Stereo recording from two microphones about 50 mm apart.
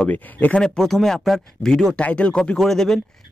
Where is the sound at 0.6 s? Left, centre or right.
Centre.